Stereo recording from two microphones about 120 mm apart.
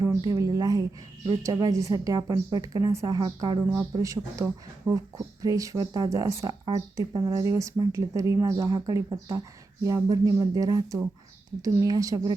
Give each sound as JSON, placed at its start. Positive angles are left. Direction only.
{"t": 0.3, "sound": "a woman's voice", "side_deg": -30}